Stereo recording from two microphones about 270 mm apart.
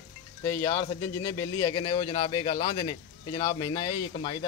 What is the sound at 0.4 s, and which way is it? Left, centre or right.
Speech, centre.